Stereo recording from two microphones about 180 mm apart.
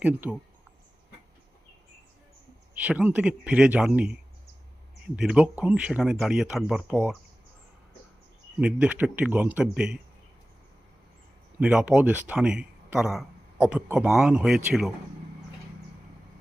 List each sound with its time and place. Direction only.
0.0 s speech: 10° right (ahead or behind)
2.7 s speech: 5° right (ahead or behind)
8.6 s speech: 5° right (ahead or behind)
11.6 s speech: 5° right (ahead or behind)